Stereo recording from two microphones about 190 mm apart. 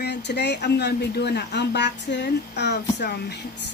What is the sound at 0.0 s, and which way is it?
Speech, 60° left (ahead or behind).